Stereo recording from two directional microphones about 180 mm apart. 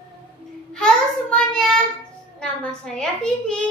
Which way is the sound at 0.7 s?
5° left (ahead or behind).